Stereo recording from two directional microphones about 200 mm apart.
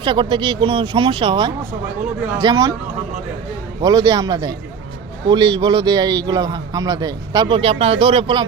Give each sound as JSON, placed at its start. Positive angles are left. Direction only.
{"t": 0.0, "sound": "a man's voice", "side_deg": -20}
{"t": 3.8, "sound": "a man's voice", "side_deg": -20}